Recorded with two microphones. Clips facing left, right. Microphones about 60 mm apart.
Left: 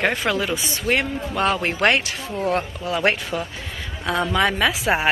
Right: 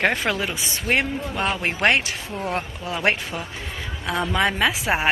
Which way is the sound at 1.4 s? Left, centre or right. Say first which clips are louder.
Left 5 dB; centre.